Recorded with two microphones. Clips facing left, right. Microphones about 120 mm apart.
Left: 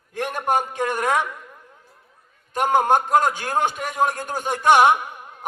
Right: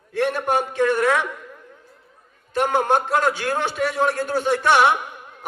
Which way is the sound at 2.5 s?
45° left (ahead or behind).